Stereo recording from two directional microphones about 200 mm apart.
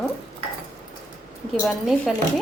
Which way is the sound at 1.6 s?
Centre (ahead or behind).